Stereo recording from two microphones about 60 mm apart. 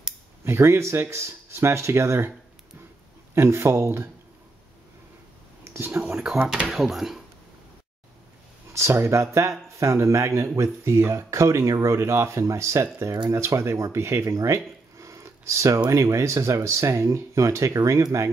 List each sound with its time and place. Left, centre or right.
0.5 s speech: right
3.3 s speech: right
5.6 s a sound: right
6.7 s speech: centre
8.7 s speech: right
13.9 s speech: right